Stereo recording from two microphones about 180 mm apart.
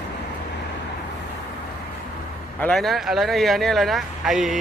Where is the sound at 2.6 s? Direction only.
5° left (ahead or behind).